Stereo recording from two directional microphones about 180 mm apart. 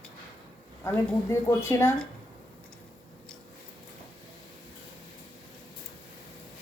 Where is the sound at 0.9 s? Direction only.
15° left (ahead or behind).